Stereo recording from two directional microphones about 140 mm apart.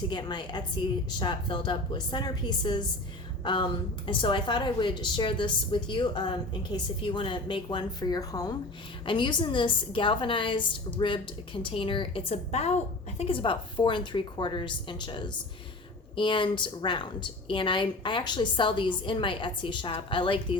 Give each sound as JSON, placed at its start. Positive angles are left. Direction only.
{"t": 0.1, "sound": "a woman's voice", "side_deg": 30}